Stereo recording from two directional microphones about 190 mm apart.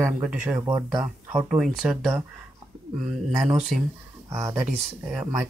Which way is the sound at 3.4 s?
Centre (ahead or behind).